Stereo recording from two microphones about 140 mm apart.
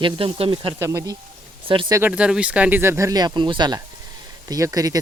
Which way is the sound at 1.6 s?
40° right (ahead or behind).